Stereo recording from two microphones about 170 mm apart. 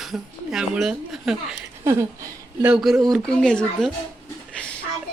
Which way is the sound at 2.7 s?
Centre (ahead or behind).